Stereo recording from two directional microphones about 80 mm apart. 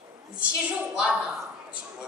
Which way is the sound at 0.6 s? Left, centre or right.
Centre.